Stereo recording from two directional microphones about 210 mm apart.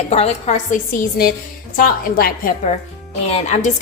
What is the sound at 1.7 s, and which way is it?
Speech, 45° left (ahead or behind).